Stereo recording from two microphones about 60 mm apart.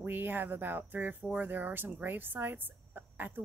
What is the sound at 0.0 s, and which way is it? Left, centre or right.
Speech, right.